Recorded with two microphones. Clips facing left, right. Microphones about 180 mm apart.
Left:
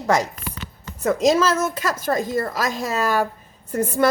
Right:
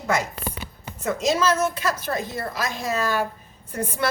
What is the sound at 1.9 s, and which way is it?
A woman's voice, 45° left (ahead or behind).